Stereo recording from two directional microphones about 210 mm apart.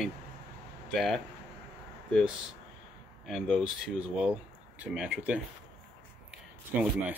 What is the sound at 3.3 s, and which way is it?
Speech, centre (ahead or behind).